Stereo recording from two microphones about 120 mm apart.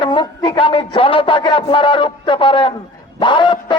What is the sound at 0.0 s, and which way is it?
Speech, 40° left (ahead or behind).